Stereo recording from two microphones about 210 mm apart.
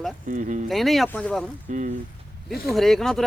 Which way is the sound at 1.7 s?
35° right (ahead or behind).